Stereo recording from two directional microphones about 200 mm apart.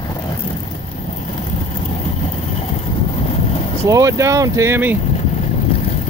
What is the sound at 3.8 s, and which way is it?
Speech, 15° right (ahead or behind).